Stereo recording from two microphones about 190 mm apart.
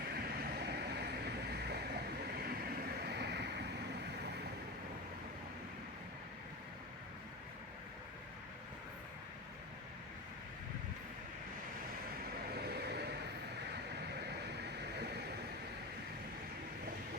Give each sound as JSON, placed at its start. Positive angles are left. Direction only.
{"t": 0.3, "sound": "vehicle", "side_deg": -55}
{"t": 12.5, "sound": "vehicle", "side_deg": -60}
{"t": 13.9, "sound": "a sound", "side_deg": -60}